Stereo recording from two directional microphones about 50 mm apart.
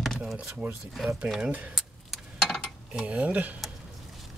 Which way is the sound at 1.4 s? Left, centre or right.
Right.